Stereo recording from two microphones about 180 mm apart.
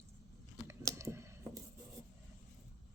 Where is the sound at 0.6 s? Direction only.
15° right (ahead or behind).